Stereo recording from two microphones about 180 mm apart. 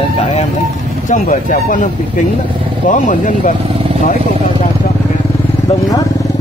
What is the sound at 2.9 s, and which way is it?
Speech, 45° left (ahead or behind).